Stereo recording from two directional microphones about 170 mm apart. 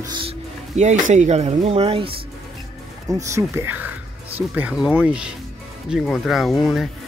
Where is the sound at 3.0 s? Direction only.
20° right (ahead or behind); by 6.9 s centre (ahead or behind).